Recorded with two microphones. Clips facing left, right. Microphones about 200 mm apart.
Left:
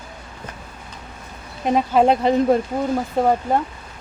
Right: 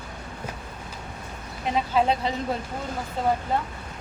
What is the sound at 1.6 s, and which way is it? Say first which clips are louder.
Speech: left 7 dB; 50° left (ahead or behind).